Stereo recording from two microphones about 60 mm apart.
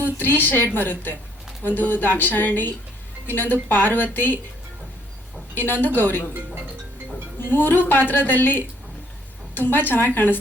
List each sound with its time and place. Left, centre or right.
0.0 s a woman's voice: left
5.5 s a woman's voice: left
7.3 s a woman's voice: left